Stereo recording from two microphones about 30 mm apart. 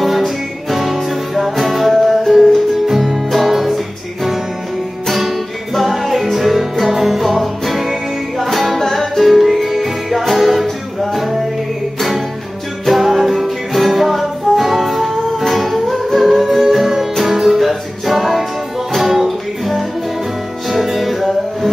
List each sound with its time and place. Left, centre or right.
0.7 s music: centre
8.7 s music: centre
12.8 s music: centre